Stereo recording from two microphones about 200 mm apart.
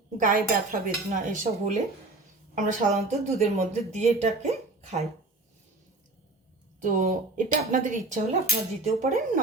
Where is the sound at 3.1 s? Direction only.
35° right (ahead or behind).